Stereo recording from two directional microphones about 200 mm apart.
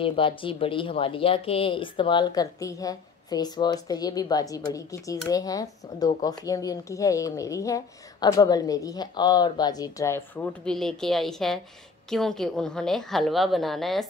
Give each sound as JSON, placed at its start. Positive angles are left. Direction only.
{"t": 0.0, "sound": "a woman's voice", "side_deg": 25}